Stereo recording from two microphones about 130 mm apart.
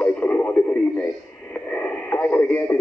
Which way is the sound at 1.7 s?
15° left (ahead or behind).